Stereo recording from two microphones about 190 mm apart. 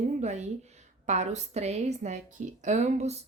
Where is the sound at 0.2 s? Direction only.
35° right (ahead or behind).